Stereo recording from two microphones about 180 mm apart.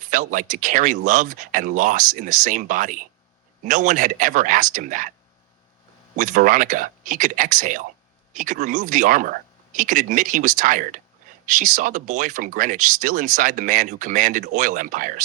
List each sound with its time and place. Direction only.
0.0 s speech: 45° right (ahead or behind)
6.1 s speech: 45° right (ahead or behind)